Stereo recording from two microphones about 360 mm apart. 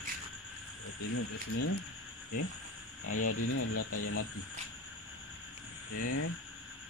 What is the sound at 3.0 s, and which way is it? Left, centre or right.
Speech, left.